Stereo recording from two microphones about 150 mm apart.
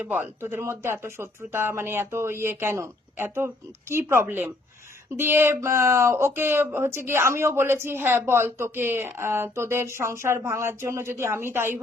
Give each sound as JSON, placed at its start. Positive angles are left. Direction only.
{"t": 0.0, "sound": "speech", "side_deg": -15}